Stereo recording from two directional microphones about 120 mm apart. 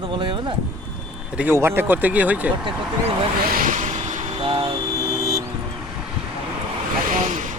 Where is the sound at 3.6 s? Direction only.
90° right.